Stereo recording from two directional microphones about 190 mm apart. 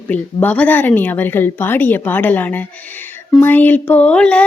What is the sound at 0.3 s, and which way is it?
Speech, 10° left (ahead or behind).